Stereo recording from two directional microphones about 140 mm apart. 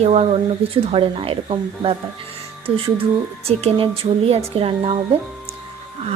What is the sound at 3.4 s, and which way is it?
A woman's voice, 45° right (ahead or behind).